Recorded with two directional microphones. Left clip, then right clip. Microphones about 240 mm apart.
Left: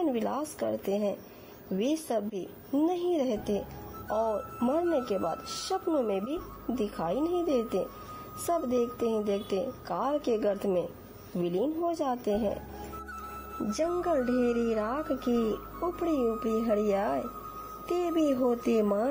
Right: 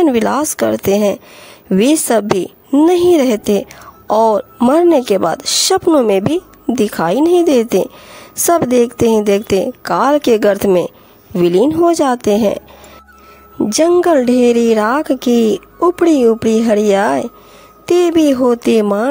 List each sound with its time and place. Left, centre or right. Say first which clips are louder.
0.0 s a woman's voice: right 18 dB; right
13.7 s a woman's voice: right 18 dB; right